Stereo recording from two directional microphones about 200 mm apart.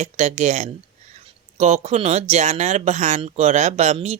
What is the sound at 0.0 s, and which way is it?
Speech, 35° right (ahead or behind).